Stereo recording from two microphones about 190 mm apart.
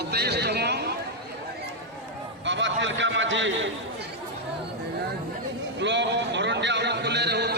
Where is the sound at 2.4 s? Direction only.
75° right (ahead or behind).